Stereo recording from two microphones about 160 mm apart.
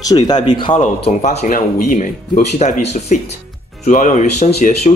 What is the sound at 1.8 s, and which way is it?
Speech, 60° left (ahead or behind).